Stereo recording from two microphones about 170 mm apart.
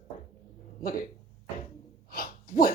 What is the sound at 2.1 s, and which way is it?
Sneeze, 55° left (ahead or behind).